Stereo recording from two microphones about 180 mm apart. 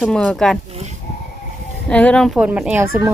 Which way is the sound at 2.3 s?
5° right (ahead or behind).